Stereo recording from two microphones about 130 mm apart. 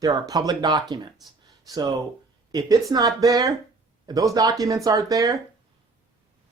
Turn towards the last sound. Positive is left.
turn(degrees=-25)  # may be behind; listen again after turning